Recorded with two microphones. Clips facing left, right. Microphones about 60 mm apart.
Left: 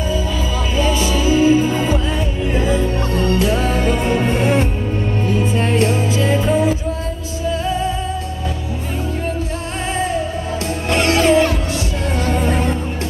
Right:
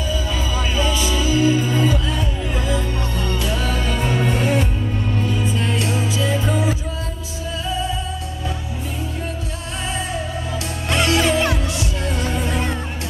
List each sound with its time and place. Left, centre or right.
0.7 s music: left
10.9 s music: left